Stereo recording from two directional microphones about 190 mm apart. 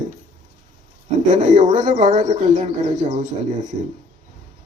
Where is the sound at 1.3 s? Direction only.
40° right (ahead or behind).